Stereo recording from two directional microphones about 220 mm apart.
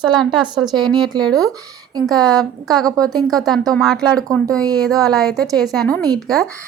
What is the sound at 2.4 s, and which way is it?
A woman's voice, centre (ahead or behind).